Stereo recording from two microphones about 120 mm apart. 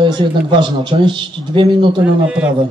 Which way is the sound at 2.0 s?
10° right (ahead or behind).